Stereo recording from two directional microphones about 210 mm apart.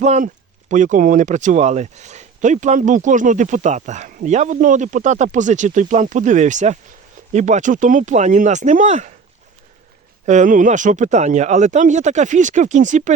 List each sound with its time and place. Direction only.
0.0 s speech: 35° right (ahead or behind)
10.2 s speech: 35° right (ahead or behind)